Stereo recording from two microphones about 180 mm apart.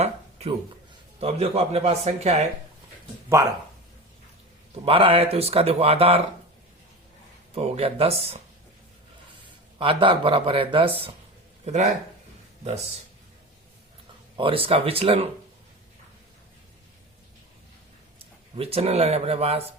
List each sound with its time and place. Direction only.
0.0 s a sound: 35° right (ahead or behind)
1.2 s speech: 35° right (ahead or behind)
4.7 s speech: 30° right (ahead or behind)
7.5 s speech: 35° right (ahead or behind)
9.7 s speech: 30° right (ahead or behind)
11.6 s speech: 40° right (ahead or behind)
14.3 s speech: 30° right (ahead or behind)
18.2 s speech: 35° right (ahead or behind)